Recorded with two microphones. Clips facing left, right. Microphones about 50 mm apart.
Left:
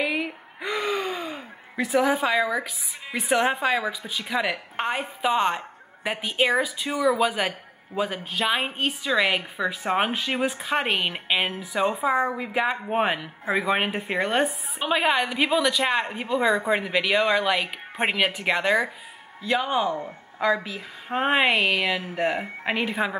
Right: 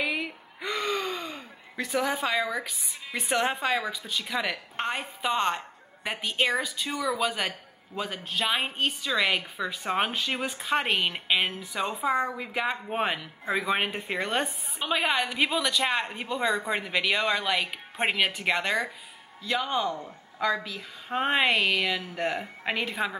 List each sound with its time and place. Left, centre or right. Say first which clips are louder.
0.0 s gasp: left 3 dB; centre
4.1 s speech: left 3 dB; centre